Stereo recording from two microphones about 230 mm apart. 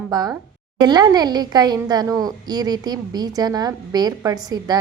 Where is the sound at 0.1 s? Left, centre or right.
Centre.